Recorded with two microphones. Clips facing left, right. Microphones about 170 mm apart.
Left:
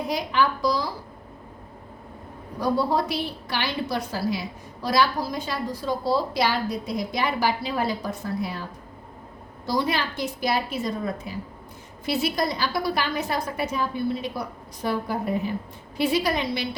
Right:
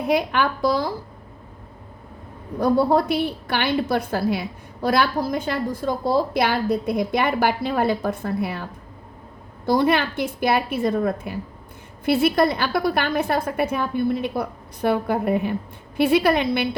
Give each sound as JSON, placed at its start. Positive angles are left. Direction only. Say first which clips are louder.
{"t": 0.1, "sound": "a woman's voice", "louder": "right 4 dB", "side_deg": -60}
{"t": 2.6, "sound": "a woman's voice", "louder": "right 5 dB", "side_deg": -55}
{"t": 9.6, "sound": "a woman's voice", "louder": "right 6 dB", "side_deg": -55}